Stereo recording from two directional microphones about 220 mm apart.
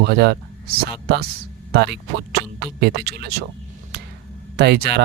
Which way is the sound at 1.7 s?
50° right (ahead or behind).